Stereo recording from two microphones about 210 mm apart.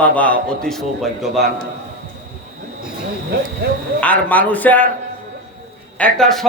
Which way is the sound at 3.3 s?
45° right (ahead or behind).